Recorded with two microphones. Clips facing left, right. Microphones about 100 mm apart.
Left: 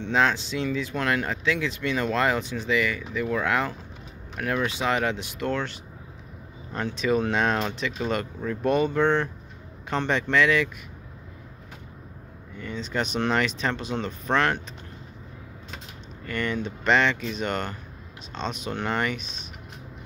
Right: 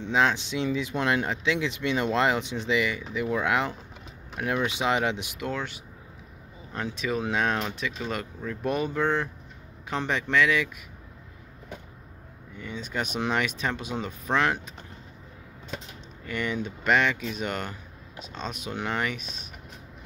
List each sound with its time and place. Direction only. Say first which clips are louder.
0.0 s speech: left 1 dB; 15° right (ahead or behind)
5.4 s speech: left 7 dB; 5° right (ahead or behind)
12.5 s speech: left 3 dB; 10° right (ahead or behind)
16.3 s speech: left 2 dB; 10° right (ahead or behind)